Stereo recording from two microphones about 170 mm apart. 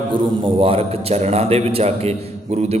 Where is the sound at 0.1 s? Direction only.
30° right (ahead or behind).